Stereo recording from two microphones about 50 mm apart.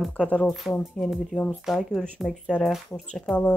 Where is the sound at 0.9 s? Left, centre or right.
Centre.